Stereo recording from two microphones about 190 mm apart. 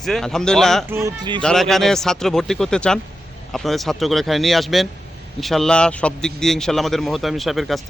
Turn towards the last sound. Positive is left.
turn(degrees=0)  # may be behind; listen again after turning